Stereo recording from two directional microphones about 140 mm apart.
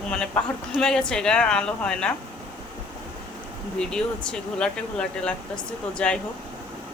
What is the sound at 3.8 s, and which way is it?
Speech, 5° left (ahead or behind).